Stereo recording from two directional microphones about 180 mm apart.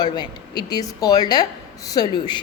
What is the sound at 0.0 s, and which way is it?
A woman's voice, 25° left (ahead or behind).